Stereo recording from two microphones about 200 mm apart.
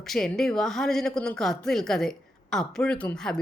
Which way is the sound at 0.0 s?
Centre (ahead or behind).